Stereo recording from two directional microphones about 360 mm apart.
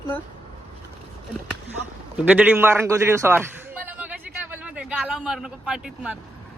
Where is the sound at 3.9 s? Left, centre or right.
Centre.